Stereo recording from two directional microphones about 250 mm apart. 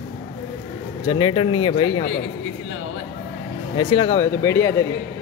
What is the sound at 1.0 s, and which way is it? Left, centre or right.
Speech, centre.